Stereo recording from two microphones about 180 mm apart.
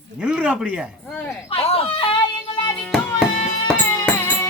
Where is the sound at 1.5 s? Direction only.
30° left (ahead or behind).